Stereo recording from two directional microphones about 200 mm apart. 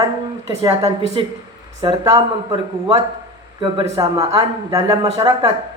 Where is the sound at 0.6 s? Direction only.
20° right (ahead or behind).